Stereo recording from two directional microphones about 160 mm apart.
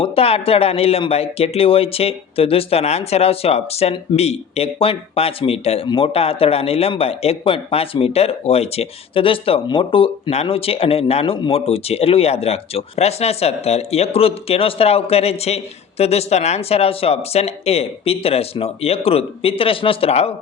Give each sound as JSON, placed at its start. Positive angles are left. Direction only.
{"t": 0.0, "sound": "speech", "side_deg": 40}